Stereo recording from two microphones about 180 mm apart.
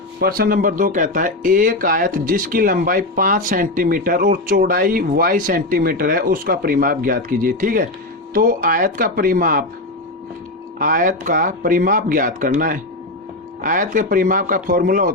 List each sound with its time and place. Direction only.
0.2 s speech: 55° right (ahead or behind)
10.8 s speech: 50° right (ahead or behind)